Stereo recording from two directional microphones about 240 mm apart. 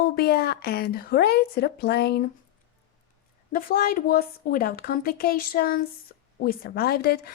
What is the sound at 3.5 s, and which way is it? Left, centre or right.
Speech, left.